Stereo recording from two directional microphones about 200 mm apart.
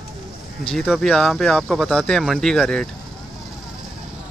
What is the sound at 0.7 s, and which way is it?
Speech, centre (ahead or behind).